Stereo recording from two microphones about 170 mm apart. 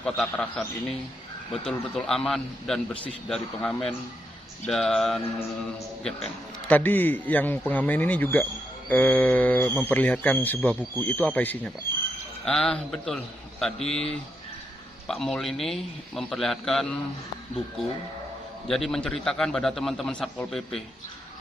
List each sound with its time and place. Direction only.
0.0 s a man's voice: 5° left (ahead or behind)
15.0 s a man's voice: centre (ahead or behind)
18.7 s a man's voice: centre (ahead or behind)